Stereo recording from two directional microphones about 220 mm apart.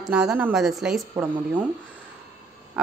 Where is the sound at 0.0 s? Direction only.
Centre (ahead or behind).